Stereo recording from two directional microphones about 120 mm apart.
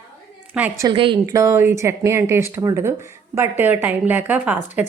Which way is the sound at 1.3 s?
25° right (ahead or behind).